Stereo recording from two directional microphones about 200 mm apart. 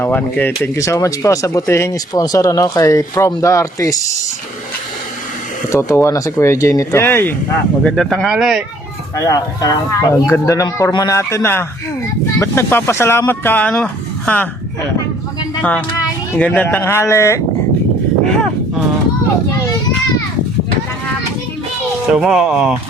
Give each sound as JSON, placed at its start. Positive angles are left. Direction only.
{"t": 0.0, "sound": "speech", "side_deg": 10}
{"t": 5.7, "sound": "speech", "side_deg": 15}
{"t": 9.1, "sound": "speech", "side_deg": 15}
{"t": 15.6, "sound": "speech", "side_deg": 10}
{"t": 18.3, "sound": "speech", "side_deg": 5}
{"t": 22.1, "sound": "speech", "side_deg": -5}